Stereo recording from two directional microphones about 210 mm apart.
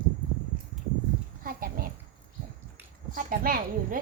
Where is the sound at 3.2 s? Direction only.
40° right (ahead or behind).